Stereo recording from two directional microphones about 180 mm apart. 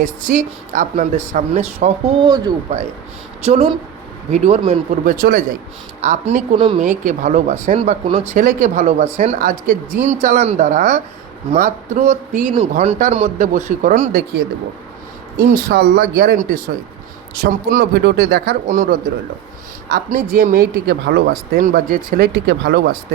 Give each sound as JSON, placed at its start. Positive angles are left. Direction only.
{"t": 0.0, "sound": "speech", "side_deg": -45}
{"t": 2.2, "sound": "speech", "side_deg": -25}
{"t": 3.4, "sound": "speech", "side_deg": -35}
{"t": 5.0, "sound": "speech", "side_deg": -50}
{"t": 6.0, "sound": "speech", "side_deg": -40}
{"t": 6.7, "sound": "speech", "side_deg": -45}
{"t": 14.1, "sound": "speech", "side_deg": -55}